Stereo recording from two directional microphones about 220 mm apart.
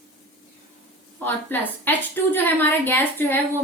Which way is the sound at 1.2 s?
10° left (ahead or behind).